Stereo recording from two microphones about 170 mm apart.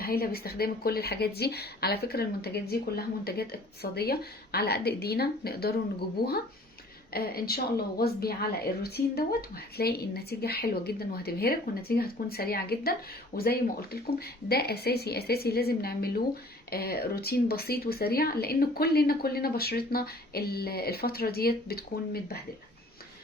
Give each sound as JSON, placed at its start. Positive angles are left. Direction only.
{"t": 0.0, "sound": "a woman's voice", "side_deg": 65}